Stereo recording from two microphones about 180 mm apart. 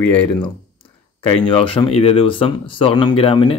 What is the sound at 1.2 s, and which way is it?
Speech, 25° left (ahead or behind).